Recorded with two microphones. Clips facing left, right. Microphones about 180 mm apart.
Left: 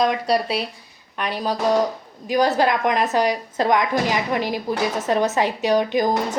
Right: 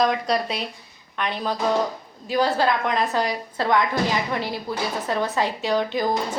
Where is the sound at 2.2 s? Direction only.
15° left (ahead or behind).